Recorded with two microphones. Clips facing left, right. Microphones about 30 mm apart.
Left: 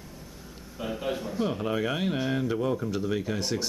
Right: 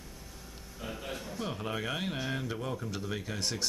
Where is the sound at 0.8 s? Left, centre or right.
Centre.